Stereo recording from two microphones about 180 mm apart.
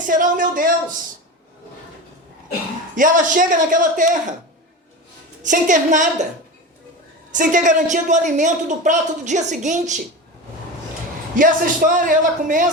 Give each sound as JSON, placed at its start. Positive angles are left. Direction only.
{"t": 0.1, "sound": "a woman's voice", "side_deg": -50}
{"t": 2.9, "sound": "a woman's voice", "side_deg": -45}
{"t": 5.4, "sound": "a woman's voice", "side_deg": -45}
{"t": 7.3, "sound": "a woman's voice", "side_deg": -45}
{"t": 11.3, "sound": "a woman's voice", "side_deg": -50}